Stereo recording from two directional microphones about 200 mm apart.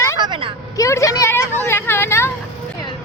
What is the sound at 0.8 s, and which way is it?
Vehicle, 15° left (ahead or behind).